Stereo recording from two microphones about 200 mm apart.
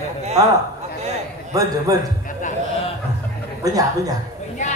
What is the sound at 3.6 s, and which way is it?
Speech, 15° right (ahead or behind).